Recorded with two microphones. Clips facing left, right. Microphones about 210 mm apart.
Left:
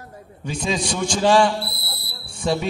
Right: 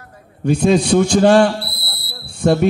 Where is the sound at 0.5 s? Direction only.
60° right (ahead or behind).